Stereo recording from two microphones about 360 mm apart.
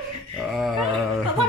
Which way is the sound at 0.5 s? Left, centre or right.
Centre.